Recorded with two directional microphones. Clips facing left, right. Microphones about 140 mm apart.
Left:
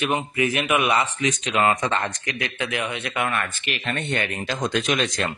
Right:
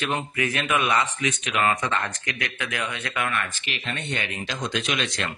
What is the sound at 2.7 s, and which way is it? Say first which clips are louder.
Speech: left 3 dB; 20° left (ahead or behind).